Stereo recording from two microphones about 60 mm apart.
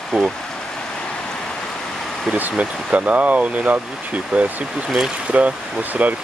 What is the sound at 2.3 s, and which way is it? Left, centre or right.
Speech, right.